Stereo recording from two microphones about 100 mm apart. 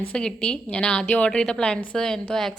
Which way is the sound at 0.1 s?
10° left (ahead or behind).